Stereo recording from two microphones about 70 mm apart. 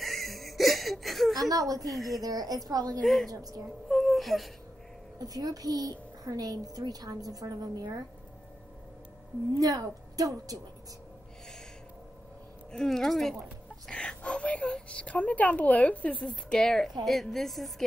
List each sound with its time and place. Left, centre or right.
0.0 s a sound: centre
1.4 s a woman's voice: right
1.9 s a woman's voice: centre
2.1 s a woman's voice: right
3.0 s a woman's voice: centre
3.3 s a woman's voice: right
3.9 s whimper: centre
5.2 s a woman's voice: right
9.6 s a woman's voice: right
12.7 s a woman's voice: centre
13.8 s a woman's voice: centre